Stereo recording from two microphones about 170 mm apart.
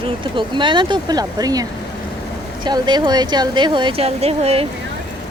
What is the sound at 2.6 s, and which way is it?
Speech, 25° right (ahead or behind).